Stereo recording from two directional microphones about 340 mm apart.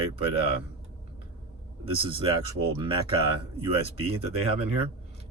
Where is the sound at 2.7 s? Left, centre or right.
Centre.